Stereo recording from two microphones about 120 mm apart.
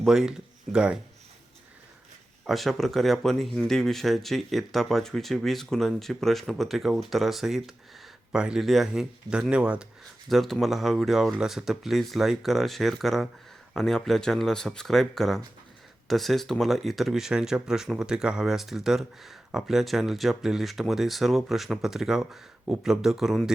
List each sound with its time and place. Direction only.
0.0 s speech: 5° right (ahead or behind)
2.5 s speech: centre (ahead or behind)